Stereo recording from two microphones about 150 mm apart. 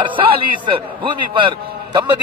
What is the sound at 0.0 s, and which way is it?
A man's voice, 35° right (ahead or behind).